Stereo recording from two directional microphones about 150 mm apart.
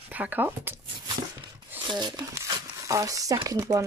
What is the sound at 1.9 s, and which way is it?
Speech, 30° right (ahead or behind).